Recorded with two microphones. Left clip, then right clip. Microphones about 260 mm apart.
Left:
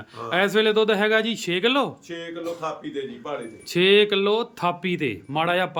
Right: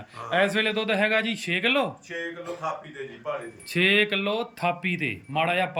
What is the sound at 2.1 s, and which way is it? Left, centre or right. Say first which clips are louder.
Speech: right 1 dB; left.